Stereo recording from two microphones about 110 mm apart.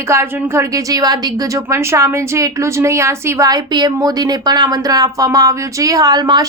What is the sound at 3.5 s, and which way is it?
Speech, 35° right (ahead or behind).